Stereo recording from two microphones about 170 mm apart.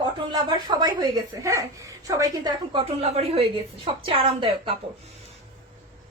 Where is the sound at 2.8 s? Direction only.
40° right (ahead or behind).